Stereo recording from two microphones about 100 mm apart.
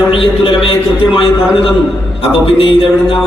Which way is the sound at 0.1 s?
60° left (ahead or behind).